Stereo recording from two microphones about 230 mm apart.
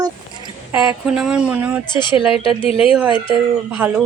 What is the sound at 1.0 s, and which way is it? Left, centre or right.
Speech, centre.